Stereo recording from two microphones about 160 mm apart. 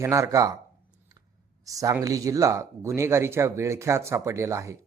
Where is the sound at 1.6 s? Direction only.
20° right (ahead or behind).